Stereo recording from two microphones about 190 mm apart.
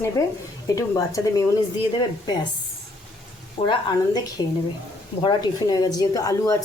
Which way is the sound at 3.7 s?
25° left (ahead or behind).